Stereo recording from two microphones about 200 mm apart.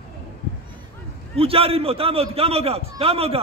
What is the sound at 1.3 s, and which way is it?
A man's voice, 30° right (ahead or behind).